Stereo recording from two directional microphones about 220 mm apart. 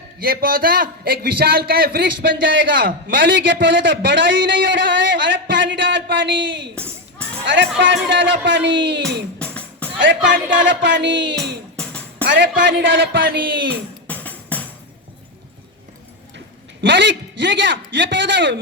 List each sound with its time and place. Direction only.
0.2 s a man's voice: 40° right (ahead or behind)
3.1 s a man's voice: 55° right (ahead or behind)
9.4 s music: 5° left (ahead or behind)
10.0 s a man's voice: 55° right (ahead or behind)
11.8 s music: 5° left (ahead or behind)
12.2 s music: 55° right (ahead or behind)
12.6 s a man's voice: 55° right (ahead or behind)
14.1 s music: 5° left (ahead or behind)
16.8 s a man's voice: 55° right (ahead or behind)